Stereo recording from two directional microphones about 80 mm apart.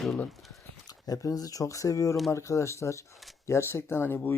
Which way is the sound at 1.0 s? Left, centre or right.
Left.